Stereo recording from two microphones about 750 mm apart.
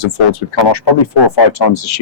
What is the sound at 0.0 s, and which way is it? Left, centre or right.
A man's voice, left.